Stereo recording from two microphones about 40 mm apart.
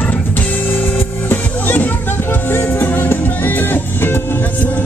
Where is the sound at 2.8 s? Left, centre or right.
Left.